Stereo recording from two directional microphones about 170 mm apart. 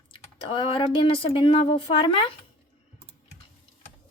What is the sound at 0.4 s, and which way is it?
Speech, 30° left (ahead or behind).